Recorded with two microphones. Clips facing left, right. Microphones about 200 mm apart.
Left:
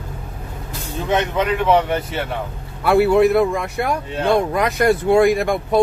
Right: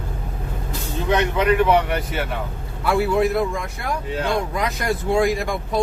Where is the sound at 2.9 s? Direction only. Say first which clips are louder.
Left 6 dB; 65° left (ahead or behind).